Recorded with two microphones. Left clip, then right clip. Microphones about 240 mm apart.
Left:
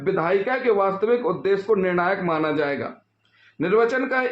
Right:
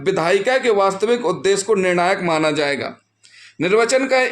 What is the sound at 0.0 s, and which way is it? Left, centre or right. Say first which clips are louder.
Speech: right 4 dB; right.